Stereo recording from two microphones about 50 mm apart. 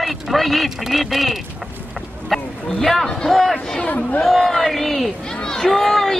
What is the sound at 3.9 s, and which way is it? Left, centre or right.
Speech, left.